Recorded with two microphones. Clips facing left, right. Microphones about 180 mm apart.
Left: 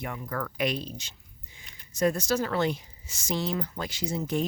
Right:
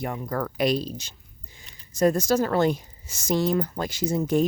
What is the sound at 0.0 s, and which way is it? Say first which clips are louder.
A woman's voice: right 5 dB; 35° right (ahead or behind).